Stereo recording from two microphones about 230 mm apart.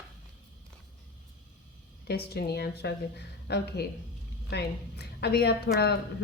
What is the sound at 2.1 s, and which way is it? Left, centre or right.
A woman's voice, left.